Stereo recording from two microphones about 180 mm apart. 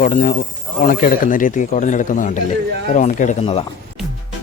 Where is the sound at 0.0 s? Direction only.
45° left (ahead or behind).